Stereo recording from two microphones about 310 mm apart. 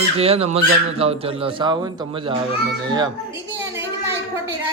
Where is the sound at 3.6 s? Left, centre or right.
Centre.